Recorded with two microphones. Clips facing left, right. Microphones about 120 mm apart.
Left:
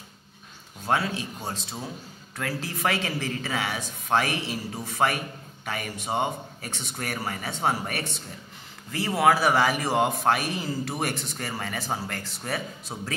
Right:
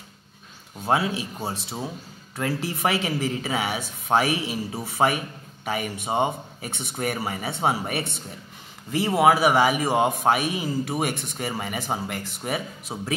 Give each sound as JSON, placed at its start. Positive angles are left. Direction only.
{"t": 1.0, "sound": "a man's voice", "side_deg": -5}
{"t": 2.3, "sound": "a man's voice", "side_deg": -25}